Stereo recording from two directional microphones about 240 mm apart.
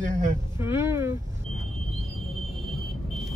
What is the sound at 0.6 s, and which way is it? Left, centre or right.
Speech, centre.